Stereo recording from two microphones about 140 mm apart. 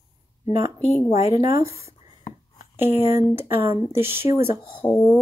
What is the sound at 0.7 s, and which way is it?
Speech, 50° left (ahead or behind).